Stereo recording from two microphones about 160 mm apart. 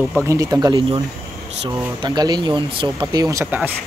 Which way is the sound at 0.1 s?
20° right (ahead or behind).